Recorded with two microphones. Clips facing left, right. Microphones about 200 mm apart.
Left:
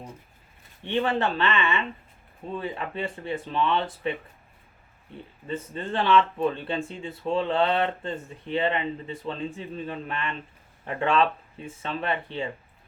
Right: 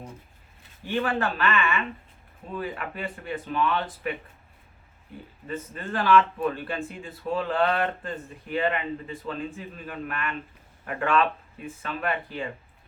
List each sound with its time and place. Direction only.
0.8 s speech: 25° left (ahead or behind)
5.5 s speech: 25° left (ahead or behind)